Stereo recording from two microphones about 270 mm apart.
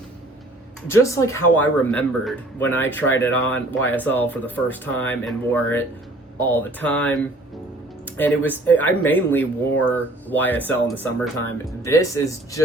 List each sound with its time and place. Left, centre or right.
0.9 s speech: centre